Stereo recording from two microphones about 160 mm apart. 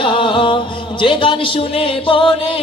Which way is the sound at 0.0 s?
30° left (ahead or behind).